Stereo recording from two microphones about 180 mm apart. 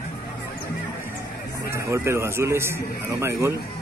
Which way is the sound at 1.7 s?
15° right (ahead or behind).